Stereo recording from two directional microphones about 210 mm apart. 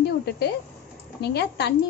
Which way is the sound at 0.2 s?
50° left (ahead or behind).